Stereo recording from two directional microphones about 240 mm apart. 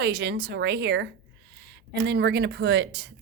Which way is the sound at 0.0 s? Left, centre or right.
Right.